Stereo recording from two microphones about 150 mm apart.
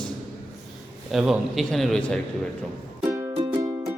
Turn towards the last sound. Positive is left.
turn(degrees=-20)  # may be behind; listen again after turning